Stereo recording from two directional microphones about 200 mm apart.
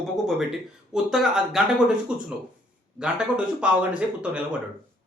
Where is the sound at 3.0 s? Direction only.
5° right (ahead or behind).